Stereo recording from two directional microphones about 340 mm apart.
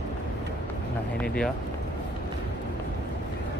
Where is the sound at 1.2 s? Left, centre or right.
Centre.